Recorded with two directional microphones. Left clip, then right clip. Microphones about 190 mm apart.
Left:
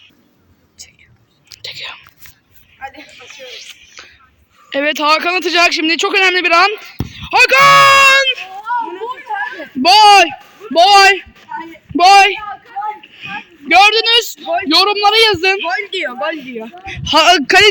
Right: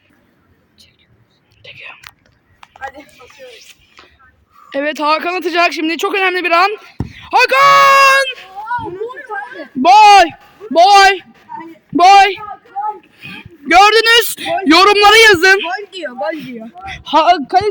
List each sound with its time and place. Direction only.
1.6 s whispering: 20° left (ahead or behind)
2.8 s a sound: 10° left (ahead or behind)
3.2 s speech: 5° right (ahead or behind)
7.3 s a sound: 5° left (ahead or behind)
9.8 s a man's voice: 10° right (ahead or behind)
10.9 s a man's voice: centre (ahead or behind)
13.0 s a sound: 5° right (ahead or behind)
13.7 s a woman's voice: 25° right (ahead or behind)
13.9 s speech: 45° right (ahead or behind)
15.4 s a woman's voice: 30° right (ahead or behind)
17.2 s speech: 5° left (ahead or behind)